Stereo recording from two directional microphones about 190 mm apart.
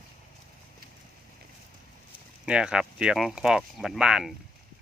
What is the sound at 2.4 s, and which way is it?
Speech, 5° right (ahead or behind).